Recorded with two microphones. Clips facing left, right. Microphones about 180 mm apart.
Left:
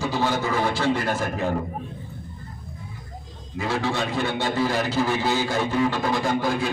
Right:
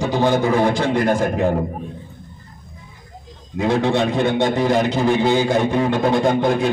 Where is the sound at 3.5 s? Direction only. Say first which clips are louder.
Right 8 dB; 20° right (ahead or behind).